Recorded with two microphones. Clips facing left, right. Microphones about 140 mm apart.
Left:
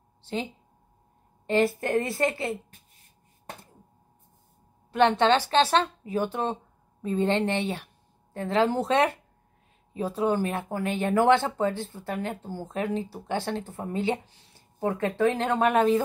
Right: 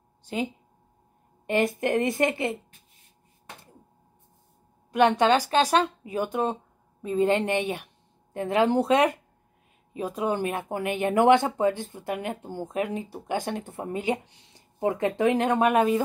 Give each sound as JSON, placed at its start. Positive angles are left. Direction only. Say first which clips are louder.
{"t": 1.5, "sound": "speech", "louder": "even", "side_deg": -20}
{"t": 4.9, "sound": "speech", "louder": "right 1 dB", "side_deg": -10}